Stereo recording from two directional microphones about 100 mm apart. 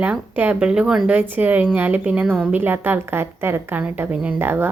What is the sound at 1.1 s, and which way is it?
A woman's voice, 20° right (ahead or behind).